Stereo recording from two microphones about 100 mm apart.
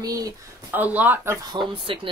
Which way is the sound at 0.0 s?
35° right (ahead or behind).